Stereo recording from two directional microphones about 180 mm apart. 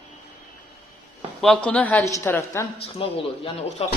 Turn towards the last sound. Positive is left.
turn(degrees=30)  # may be behind; listen again after turning